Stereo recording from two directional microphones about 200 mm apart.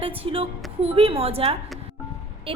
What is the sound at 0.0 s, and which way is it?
A woman's voice, 25° right (ahead or behind).